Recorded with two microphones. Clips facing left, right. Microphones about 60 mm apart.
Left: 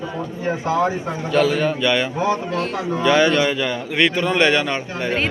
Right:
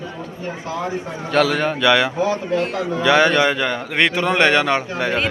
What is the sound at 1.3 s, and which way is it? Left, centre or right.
Speech, right.